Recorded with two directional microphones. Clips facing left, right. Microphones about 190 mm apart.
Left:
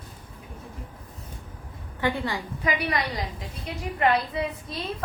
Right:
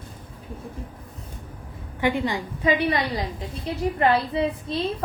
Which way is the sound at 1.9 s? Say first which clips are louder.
Right 4 dB; 15° right (ahead or behind).